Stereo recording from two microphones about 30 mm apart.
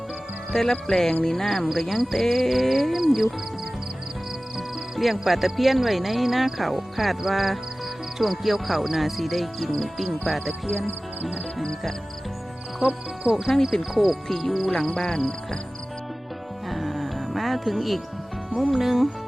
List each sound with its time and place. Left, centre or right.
0.5 s speech: centre
1.7 s speech: centre
4.5 s music: centre
5.5 s speech: centre
13.3 s speech: centre
14.3 s speech: centre
14.9 s speech: centre
16.6 s music: centre
18.7 s speech: centre